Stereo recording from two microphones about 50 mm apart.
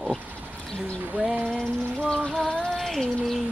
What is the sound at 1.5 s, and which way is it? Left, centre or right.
Music, centre.